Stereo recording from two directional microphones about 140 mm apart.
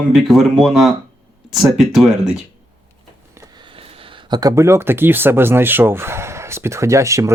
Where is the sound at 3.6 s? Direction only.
40° right (ahead or behind).